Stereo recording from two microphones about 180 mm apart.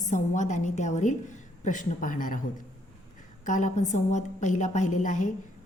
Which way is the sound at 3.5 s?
45° left (ahead or behind).